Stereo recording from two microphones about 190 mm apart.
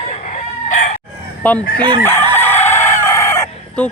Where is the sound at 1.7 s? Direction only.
25° right (ahead or behind).